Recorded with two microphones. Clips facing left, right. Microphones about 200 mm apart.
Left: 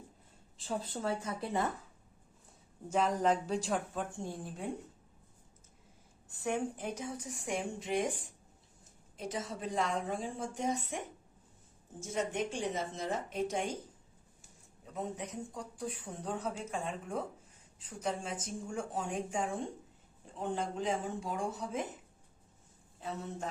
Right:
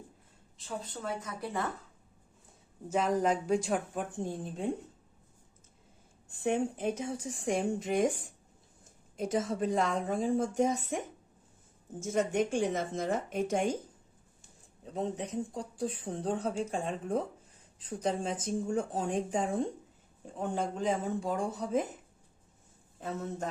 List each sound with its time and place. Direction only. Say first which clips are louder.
0.6 s speech: left 2 dB; 30° left (ahead or behind)
2.9 s speech: right 2 dB; 10° right (ahead or behind)
6.3 s speech: right 5 dB; 25° right (ahead or behind)
9.1 s speech: right 8 dB; 45° right (ahead or behind)
11.9 s speech: right 6 dB; 50° right (ahead or behind)
14.9 s speech: right 6 dB; 30° right (ahead or behind)
20.3 s speech: right 2 dB; 45° right (ahead or behind)
23.0 s speech: right 4 dB; 50° right (ahead or behind)